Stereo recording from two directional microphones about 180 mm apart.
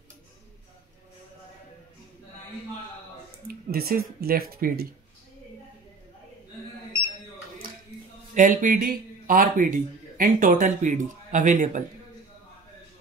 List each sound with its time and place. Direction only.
3.4 s speech: 55° right (ahead or behind)
8.4 s a man's voice: 45° right (ahead or behind)